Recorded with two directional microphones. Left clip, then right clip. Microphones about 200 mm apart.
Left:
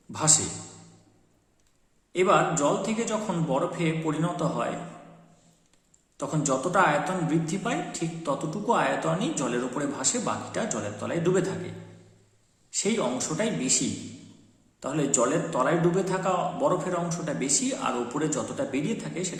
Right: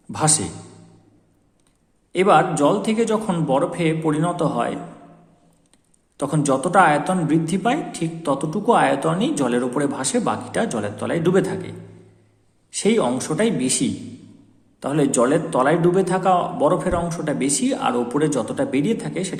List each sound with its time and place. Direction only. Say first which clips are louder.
0.1 s a man's voice: right 5 dB; 45° right (ahead or behind)
2.1 s a man's voice: right 6 dB; 45° right (ahead or behind)
6.1 s a man's voice: right 7 dB; 40° right (ahead or behind)
12.7 s a man's voice: right 8 dB; 40° right (ahead or behind)